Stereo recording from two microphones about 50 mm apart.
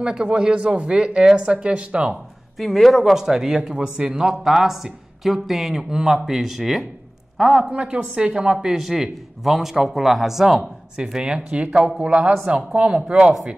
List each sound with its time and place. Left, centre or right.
0.0 s a woman's voice: centre
2.6 s speech: centre
7.7 s a woman's voice: right
8.5 s a woman's voice: centre; by 13.0 s right